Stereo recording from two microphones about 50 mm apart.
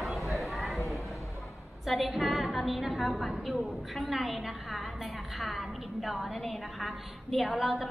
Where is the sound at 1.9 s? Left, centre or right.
Centre.